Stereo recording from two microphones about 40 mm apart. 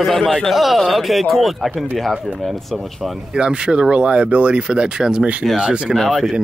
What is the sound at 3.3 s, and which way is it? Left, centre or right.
Speech, right.